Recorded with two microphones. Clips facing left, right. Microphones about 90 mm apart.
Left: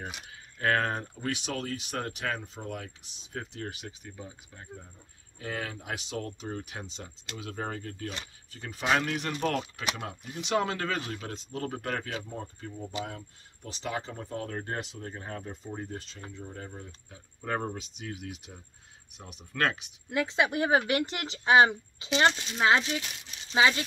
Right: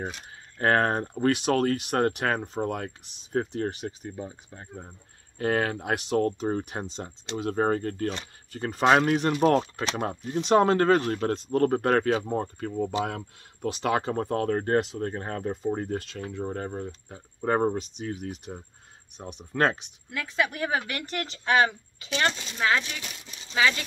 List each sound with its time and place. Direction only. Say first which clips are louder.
0.6 s speech: right 5 dB; 40° right (ahead or behind)
5.4 s speech: right 11 dB; 60° right (ahead or behind)
17.4 s speech: right 9 dB; 35° right (ahead or behind)
20.1 s speech: left 1 dB; 25° left (ahead or behind)